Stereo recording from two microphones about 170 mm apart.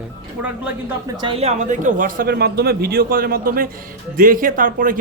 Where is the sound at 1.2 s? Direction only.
35° right (ahead or behind).